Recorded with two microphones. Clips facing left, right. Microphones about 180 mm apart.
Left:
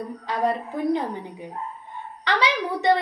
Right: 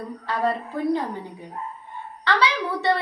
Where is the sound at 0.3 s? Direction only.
20° left (ahead or behind).